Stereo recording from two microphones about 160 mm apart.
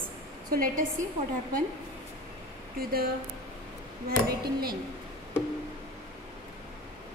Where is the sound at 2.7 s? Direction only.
70° right (ahead or behind).